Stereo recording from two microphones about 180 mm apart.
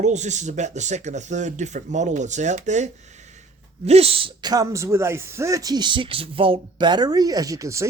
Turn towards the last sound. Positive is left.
turn(degrees=-15)  # may be behind; listen again after turning